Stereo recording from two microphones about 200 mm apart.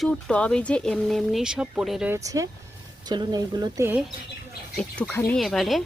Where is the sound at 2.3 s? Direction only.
15° right (ahead or behind).